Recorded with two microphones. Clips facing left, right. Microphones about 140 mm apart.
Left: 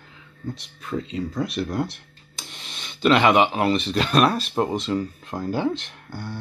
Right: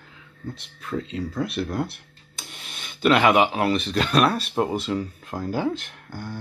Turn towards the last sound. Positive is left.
turn(degrees=-10)  # may be behind; listen again after turning